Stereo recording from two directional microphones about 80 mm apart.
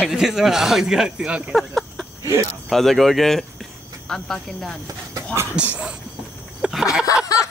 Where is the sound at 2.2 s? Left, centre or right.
Right.